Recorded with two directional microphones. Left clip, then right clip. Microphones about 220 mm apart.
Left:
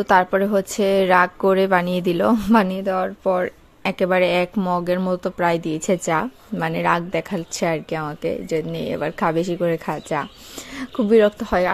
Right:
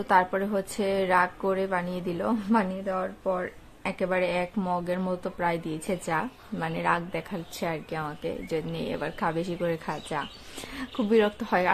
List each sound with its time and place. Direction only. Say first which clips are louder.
0.0 s a woman's voice: left 7 dB; 35° left (ahead or behind)